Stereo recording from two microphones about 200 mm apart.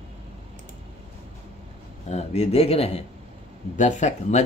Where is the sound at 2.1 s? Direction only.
35° left (ahead or behind).